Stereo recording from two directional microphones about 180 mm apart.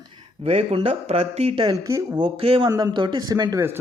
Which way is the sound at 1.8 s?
20° right (ahead or behind).